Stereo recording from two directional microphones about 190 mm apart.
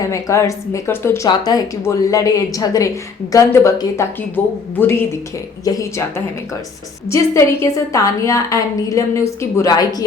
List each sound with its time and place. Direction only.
0.0 s a woman's voice: 15° left (ahead or behind)